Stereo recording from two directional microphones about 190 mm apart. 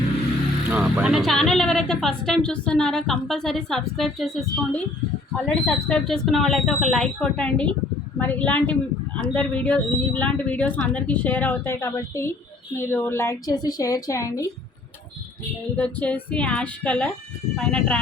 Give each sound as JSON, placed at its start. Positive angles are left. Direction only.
{"t": 0.7, "sound": "speech", "side_deg": -5}
{"t": 15.7, "sound": "speech", "side_deg": 5}